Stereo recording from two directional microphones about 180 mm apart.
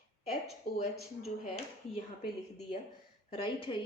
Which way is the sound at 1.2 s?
35° left (ahead or behind).